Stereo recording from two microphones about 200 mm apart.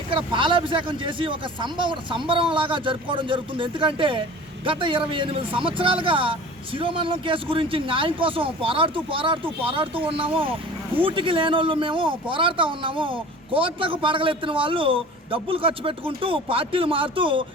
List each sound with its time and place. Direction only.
0.1 s a man's voice: 25° right (ahead or behind)